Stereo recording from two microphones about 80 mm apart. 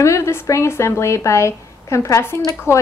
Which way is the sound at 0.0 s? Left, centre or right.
Left.